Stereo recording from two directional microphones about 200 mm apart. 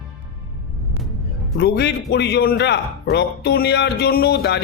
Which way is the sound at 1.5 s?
55° left (ahead or behind).